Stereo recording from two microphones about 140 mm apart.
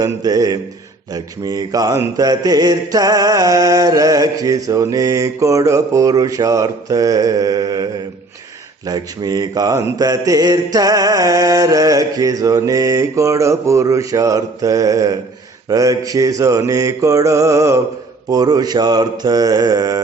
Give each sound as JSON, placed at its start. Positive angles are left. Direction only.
{"t": 0.0, "sound": "speech", "side_deg": -25}
{"t": 8.9, "sound": "speech", "side_deg": -30}